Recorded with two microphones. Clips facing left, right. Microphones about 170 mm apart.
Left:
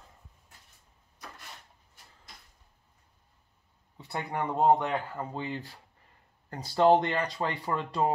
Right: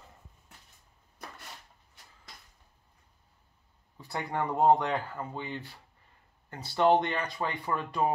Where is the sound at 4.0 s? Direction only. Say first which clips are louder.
Even; 20° left (ahead or behind).